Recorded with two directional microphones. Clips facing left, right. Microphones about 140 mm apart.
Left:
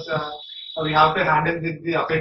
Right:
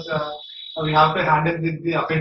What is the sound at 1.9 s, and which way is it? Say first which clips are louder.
Speech: even; centre (ahead or behind).